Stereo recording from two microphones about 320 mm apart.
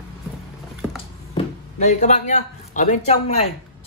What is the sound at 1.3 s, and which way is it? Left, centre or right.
Speech, left.